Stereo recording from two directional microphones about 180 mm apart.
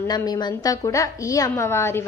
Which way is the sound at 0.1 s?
25° left (ahead or behind).